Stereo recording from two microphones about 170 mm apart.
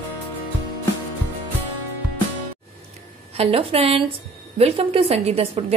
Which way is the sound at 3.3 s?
35° right (ahead or behind).